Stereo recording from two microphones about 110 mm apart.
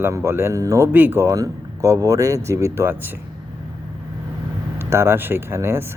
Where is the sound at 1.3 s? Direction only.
30° right (ahead or behind).